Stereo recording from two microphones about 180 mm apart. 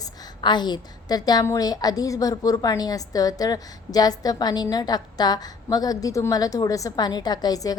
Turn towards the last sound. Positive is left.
turn(degrees=20)  # may be behind; listen again after turning